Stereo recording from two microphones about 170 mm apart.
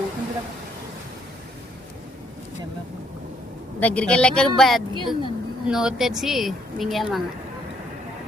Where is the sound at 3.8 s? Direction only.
10° left (ahead or behind).